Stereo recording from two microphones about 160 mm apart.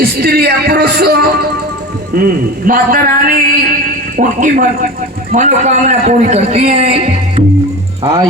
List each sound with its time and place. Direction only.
0.0 s music: 75° right (ahead or behind)
2.6 s a man's voice: 65° right (ahead or behind); by 7.4 s 40° right (ahead or behind)